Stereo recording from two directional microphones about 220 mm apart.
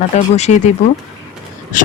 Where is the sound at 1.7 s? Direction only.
35° left (ahead or behind).